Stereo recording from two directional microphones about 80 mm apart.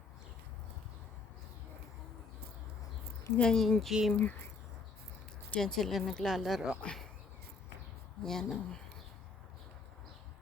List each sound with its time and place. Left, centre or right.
3.3 s speech: centre
4.1 s speech: left
5.5 s speech: centre
8.2 s speech: centre